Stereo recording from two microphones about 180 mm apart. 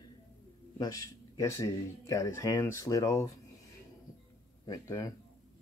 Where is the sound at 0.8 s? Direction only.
20° left (ahead or behind).